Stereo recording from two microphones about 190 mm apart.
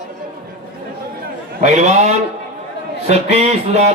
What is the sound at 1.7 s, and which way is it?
Speech, 40° right (ahead or behind).